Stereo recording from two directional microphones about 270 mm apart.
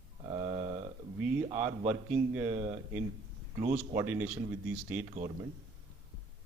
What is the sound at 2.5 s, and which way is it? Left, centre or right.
Speech, right.